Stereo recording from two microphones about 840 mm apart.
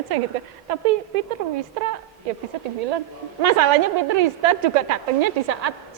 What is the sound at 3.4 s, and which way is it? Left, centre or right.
A woman's voice, right.